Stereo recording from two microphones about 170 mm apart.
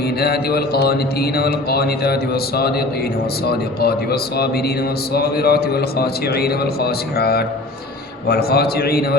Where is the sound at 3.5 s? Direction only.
65° left (ahead or behind).